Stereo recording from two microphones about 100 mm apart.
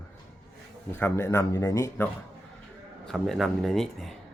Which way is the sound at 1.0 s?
25° left (ahead or behind).